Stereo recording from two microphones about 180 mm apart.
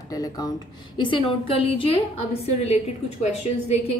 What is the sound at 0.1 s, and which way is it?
A woman's voice, 20° left (ahead or behind).